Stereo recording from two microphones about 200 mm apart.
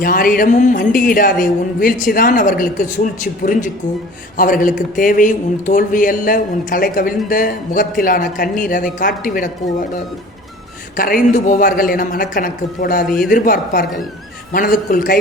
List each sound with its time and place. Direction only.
0.0 s speech: 45° left (ahead or behind)
10.9 s speech: 45° left (ahead or behind)